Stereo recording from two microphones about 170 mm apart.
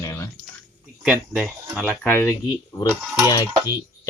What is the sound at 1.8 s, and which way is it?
Speech, 10° left (ahead or behind).